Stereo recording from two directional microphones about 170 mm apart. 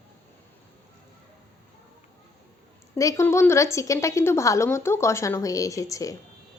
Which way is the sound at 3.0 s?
20° left (ahead or behind).